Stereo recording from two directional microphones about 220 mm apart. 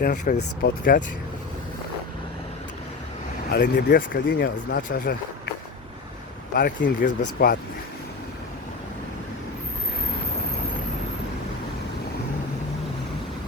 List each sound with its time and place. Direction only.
0.0 s speech: 40° left (ahead or behind)
3.5 s speech: 50° left (ahead or behind)
6.5 s speech: 40° left (ahead or behind)